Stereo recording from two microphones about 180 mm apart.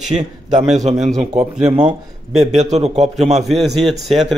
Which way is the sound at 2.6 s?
40° right (ahead or behind).